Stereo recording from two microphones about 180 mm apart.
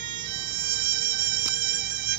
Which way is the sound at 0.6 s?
50° right (ahead or behind).